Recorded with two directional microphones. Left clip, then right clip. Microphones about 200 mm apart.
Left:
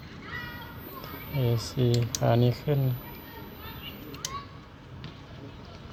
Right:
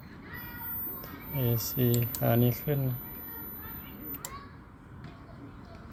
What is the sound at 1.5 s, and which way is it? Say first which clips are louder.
Speech: left 2 dB; 35° right (ahead or behind).